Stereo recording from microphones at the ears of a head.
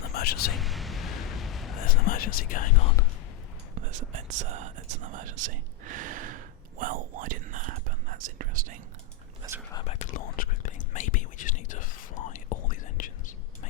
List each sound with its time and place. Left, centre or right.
0.0 s a sound: left
3.8 s whispering: right
9.7 s whispering: left